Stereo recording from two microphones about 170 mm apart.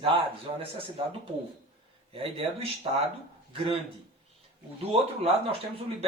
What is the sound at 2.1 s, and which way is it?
Speech, 35° right (ahead or behind).